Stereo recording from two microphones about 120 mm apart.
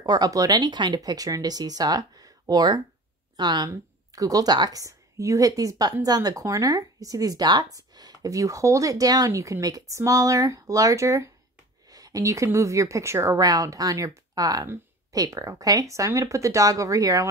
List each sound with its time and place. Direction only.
0.0 s a woman's voice: 35° right (ahead or behind)